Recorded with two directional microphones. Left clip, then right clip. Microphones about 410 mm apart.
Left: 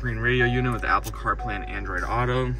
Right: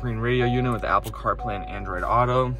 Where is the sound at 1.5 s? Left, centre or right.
Centre.